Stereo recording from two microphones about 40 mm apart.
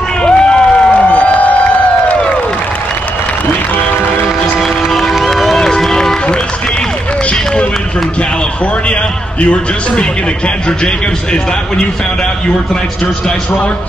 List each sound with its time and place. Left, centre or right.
0.2 s crowd: left
0.9 s music: left
4.6 s a sound: centre
5.2 s run: centre
9.4 s a man's voice: left